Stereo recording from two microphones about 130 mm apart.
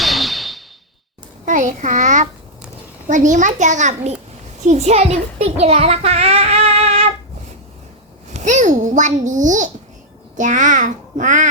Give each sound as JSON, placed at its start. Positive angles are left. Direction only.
{"t": 0.0, "sound": "a sound", "side_deg": 0}
{"t": 1.5, "sound": "a child's voice", "side_deg": -75}
{"t": 8.3, "sound": "a child's voice", "side_deg": -65}